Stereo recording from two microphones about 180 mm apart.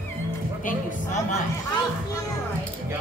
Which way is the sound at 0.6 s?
40° left (ahead or behind).